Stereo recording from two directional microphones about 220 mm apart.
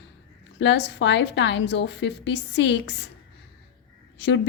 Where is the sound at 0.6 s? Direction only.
55° left (ahead or behind).